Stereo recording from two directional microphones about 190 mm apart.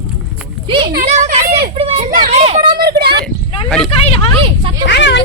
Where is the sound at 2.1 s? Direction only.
40° right (ahead or behind).